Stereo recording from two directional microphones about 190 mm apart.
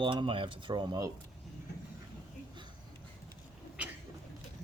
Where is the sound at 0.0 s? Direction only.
25° right (ahead or behind).